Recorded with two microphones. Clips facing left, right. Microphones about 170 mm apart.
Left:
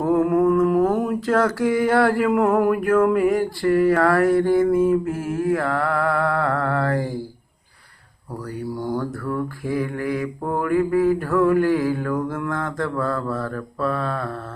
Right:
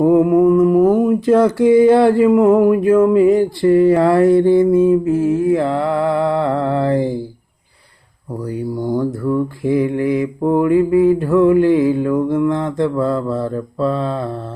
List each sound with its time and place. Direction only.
0.0 s mantra: 20° right (ahead or behind)
9.0 s mantra: 20° right (ahead or behind)